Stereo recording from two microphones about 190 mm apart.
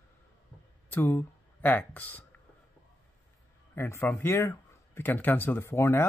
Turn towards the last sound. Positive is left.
turn(degrees=15)  # may be behind; listen again after turning